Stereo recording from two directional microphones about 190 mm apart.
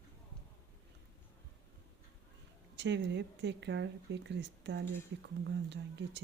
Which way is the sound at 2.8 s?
65° right (ahead or behind).